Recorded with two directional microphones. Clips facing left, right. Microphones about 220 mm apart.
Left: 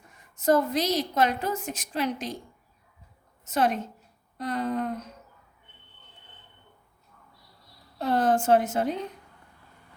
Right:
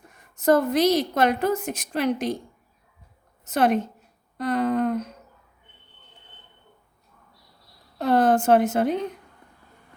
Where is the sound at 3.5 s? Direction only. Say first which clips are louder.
Right 5 dB; 65° right (ahead or behind).